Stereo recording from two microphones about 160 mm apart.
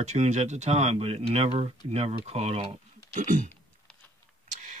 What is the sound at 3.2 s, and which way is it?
Speech, 55° right (ahead or behind).